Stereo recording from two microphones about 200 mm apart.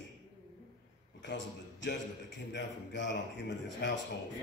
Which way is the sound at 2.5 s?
60° left (ahead or behind).